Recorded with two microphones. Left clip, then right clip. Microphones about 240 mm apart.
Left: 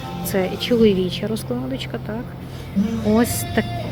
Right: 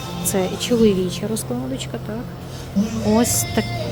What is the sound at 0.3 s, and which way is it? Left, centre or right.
Speech, centre.